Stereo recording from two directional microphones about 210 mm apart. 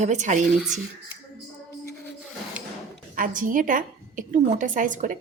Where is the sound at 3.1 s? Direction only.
40° right (ahead or behind).